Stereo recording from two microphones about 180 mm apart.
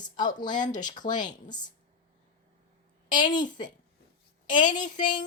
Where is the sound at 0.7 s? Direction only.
25° left (ahead or behind).